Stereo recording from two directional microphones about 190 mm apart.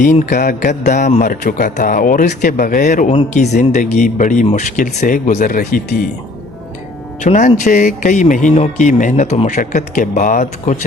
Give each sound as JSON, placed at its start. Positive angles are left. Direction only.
{"t": 0.3, "sound": "a man's voice", "side_deg": 45}
{"t": 7.2, "sound": "a man's voice", "side_deg": 40}